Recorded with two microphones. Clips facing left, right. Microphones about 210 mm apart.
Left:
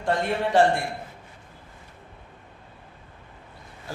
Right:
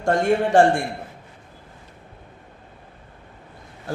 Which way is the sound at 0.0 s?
50° right (ahead or behind).